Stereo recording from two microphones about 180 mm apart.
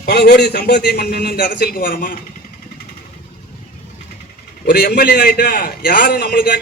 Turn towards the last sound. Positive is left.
turn(degrees=55)  # may be behind; listen again after turning